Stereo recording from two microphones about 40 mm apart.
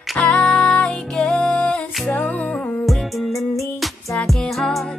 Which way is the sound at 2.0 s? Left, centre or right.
Left.